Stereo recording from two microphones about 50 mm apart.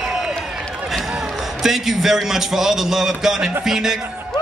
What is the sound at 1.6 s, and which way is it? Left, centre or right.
A man's voice, centre.